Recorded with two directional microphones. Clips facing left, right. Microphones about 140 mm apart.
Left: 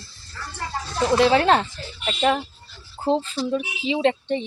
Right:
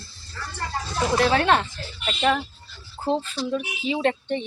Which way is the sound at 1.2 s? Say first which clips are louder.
Left 3 dB; 30° left (ahead or behind).